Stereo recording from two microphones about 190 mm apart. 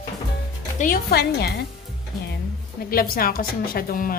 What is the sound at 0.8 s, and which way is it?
Speech, 50° left (ahead or behind).